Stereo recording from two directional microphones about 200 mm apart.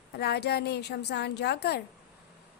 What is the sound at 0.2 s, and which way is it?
A woman's voice, 55° left (ahead or behind).